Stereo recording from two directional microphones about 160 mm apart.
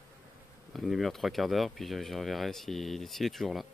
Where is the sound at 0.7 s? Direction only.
Centre (ahead or behind).